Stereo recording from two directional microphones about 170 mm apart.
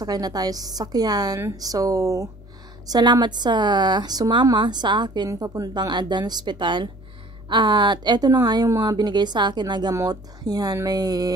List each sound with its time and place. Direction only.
0.0 s a woman's voice: 20° right (ahead or behind)